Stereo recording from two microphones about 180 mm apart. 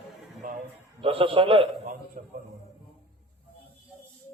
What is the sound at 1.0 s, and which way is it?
Speech, 30° right (ahead or behind).